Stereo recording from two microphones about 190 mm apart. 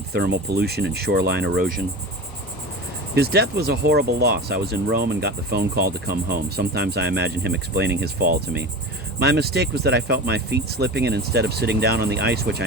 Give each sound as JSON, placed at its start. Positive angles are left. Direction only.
{"t": 0.1, "sound": "speech", "side_deg": -60}
{"t": 3.2, "sound": "speech", "side_deg": -55}
{"t": 9.2, "sound": "speech", "side_deg": -55}